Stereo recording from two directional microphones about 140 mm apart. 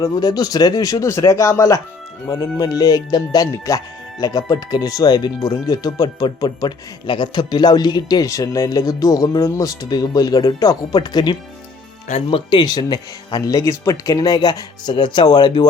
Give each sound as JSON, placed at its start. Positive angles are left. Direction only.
{"t": 0.0, "sound": "speech", "side_deg": 25}